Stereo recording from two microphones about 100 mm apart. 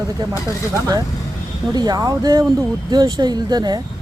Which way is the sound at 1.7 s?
40° right (ahead or behind).